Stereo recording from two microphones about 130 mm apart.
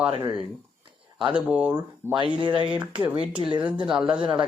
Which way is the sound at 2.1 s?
35° right (ahead or behind).